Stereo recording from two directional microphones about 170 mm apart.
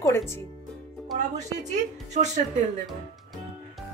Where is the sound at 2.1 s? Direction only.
45° right (ahead or behind).